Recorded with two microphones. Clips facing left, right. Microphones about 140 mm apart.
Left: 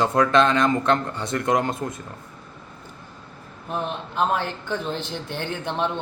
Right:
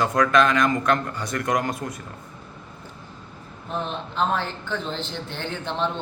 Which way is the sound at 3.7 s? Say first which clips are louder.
Left 1 dB; 10° left (ahead or behind).